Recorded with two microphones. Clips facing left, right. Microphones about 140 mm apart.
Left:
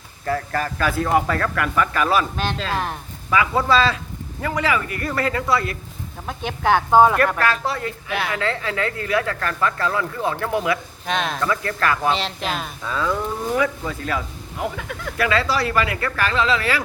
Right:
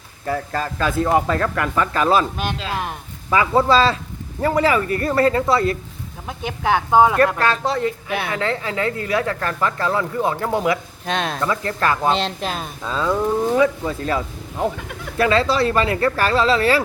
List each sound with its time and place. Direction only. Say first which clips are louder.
0.3 s speech: even; 15° right (ahead or behind)
2.3 s speech: left 1 dB; 10° right (ahead or behind)
3.2 s speech: right 3 dB; 25° right (ahead or behind)
6.2 s speech: left 1 dB; 10° right (ahead or behind)
7.2 s speech: right 2 dB; 25° right (ahead or behind)